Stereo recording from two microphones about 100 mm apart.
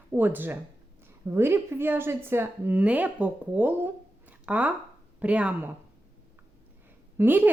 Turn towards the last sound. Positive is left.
turn(degrees=-20)  # may be behind; listen again after turning